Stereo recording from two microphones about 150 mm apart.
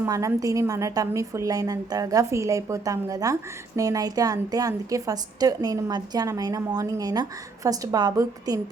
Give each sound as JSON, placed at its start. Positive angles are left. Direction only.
{"t": 0.0, "sound": "a woman's voice", "side_deg": -20}